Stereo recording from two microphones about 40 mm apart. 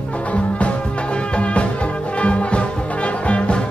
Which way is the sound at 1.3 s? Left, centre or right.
Left.